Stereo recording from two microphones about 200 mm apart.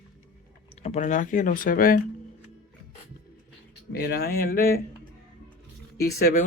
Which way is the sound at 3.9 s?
55° left (ahead or behind).